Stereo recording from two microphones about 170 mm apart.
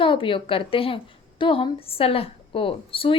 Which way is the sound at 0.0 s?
30° left (ahead or behind).